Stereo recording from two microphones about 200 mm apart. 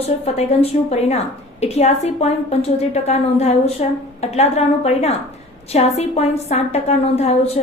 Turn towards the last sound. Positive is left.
turn(degrees=30)  # may be behind; listen again after turning